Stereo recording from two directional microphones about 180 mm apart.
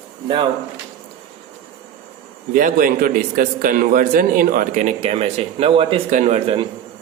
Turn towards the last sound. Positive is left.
turn(degrees=-35)  # may be behind; listen again after turning